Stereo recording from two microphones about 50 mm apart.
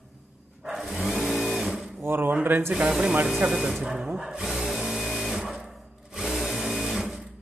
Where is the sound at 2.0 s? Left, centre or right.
Right.